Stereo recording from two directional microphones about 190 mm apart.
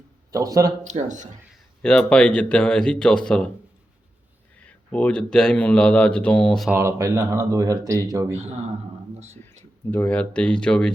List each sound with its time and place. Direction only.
0.3 s speech: 20° right (ahead or behind)
0.9 s speech: 40° right (ahead or behind)
1.8 s speech: 5° left (ahead or behind)
4.6 s speech: 5° left (ahead or behind)
6.7 s speech: 15° right (ahead or behind)
8.4 s speech: 35° right (ahead or behind)
9.9 s speech: 10° left (ahead or behind)